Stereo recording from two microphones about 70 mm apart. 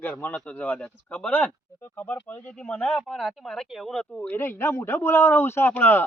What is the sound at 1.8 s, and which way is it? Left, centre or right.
Speech, left.